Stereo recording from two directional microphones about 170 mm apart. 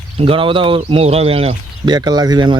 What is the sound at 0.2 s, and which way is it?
Speech, 30° right (ahead or behind).